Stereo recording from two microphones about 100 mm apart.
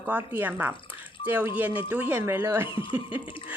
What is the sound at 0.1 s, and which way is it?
A woman's voice, 20° right (ahead or behind).